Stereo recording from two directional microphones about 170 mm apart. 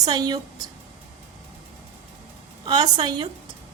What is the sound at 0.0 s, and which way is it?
Speech, 25° right (ahead or behind).